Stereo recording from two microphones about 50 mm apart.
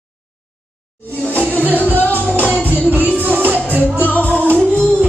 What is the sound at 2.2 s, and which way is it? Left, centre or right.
Music, right.